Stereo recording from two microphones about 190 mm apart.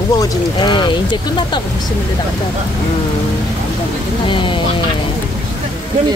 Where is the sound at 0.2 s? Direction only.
25° left (ahead or behind).